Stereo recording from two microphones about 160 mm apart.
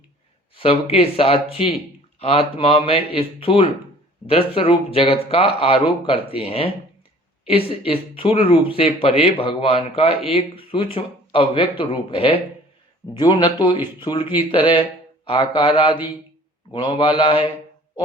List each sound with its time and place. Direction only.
0.5 s speech: 35° left (ahead or behind)
2.1 s a sound: 40° left (ahead or behind)
2.6 s speech: 35° left (ahead or behind)
7.9 s a man's voice: 35° left (ahead or behind)